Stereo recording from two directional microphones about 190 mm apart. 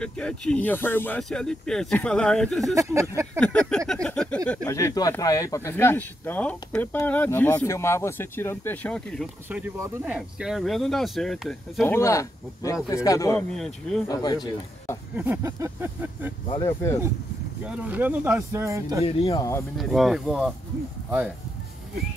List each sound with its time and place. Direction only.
0.0 s speech: 5° left (ahead or behind)
2.6 s speech: 15° right (ahead or behind)
3.3 s speech: 5° left (ahead or behind)
4.6 s speech: 15° left (ahead or behind)
9.5 s speech: 10° right (ahead or behind)
11.9 s speech: 15° left (ahead or behind)
15.1 s speech: 10° right (ahead or behind)
16.4 s speech: 20° left (ahead or behind)
17.6 s speech: 10° right (ahead or behind)
19.0 s speech: 30° left (ahead or behind)
19.8 s speech: centre (ahead or behind)